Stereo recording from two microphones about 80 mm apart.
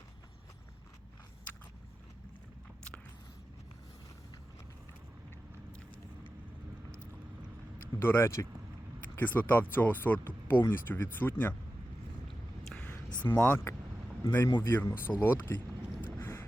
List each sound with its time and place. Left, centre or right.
7.9 s speech: left
9.1 s speech: left
13.2 s speech: left
16.1 s boat: left